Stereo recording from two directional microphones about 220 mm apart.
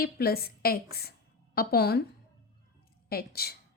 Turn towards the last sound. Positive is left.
turn(degrees=45)  # may be behind; listen again after turning